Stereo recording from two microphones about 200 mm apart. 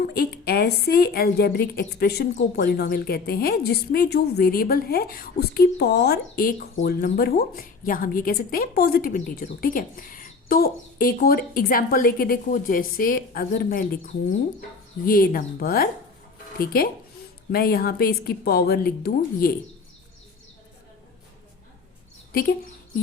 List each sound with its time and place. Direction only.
0.1 s a woman's voice: 50° left (ahead or behind)
22.3 s speech: 50° left (ahead or behind)